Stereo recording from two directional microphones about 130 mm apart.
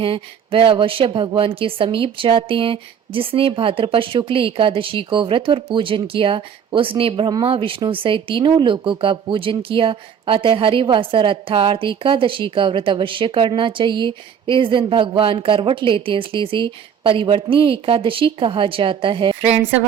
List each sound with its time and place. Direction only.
0.0 s a woman's voice: 45° right (ahead or behind)